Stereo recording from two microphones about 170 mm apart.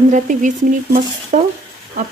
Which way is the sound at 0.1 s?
50° right (ahead or behind).